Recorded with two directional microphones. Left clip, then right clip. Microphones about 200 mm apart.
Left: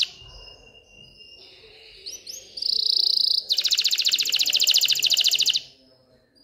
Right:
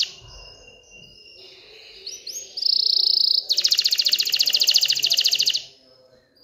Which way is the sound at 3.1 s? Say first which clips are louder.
Right 2 dB; 15° left (ahead or behind).